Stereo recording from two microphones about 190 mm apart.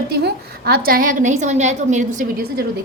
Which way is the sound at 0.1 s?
60° right (ahead or behind).